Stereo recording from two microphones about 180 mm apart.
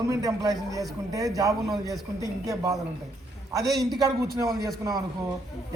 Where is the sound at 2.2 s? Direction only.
20° right (ahead or behind).